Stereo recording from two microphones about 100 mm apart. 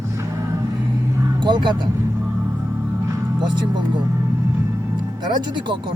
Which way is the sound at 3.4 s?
50° right (ahead or behind).